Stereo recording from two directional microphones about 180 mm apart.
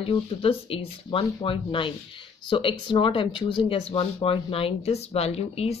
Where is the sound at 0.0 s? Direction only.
30° left (ahead or behind).